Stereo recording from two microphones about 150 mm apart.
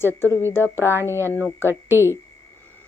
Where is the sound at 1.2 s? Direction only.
15° right (ahead or behind).